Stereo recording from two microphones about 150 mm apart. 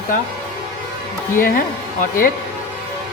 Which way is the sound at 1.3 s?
70° left (ahead or behind).